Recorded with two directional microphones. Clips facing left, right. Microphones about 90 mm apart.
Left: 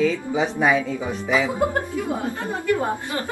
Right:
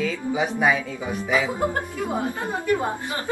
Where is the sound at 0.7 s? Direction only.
20° left (ahead or behind).